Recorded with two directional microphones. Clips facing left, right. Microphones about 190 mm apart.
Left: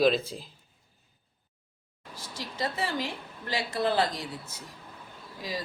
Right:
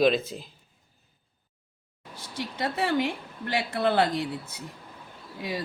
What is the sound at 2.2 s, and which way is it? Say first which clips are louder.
A woman's voice: right 2 dB; 60° right (ahead or behind).